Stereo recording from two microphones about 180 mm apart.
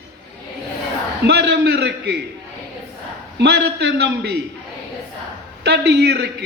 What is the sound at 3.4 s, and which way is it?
A man's voice, 70° right (ahead or behind).